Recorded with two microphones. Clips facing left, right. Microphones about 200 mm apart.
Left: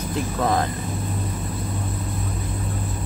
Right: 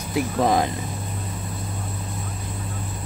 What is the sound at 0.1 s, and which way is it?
Speech, 15° right (ahead or behind).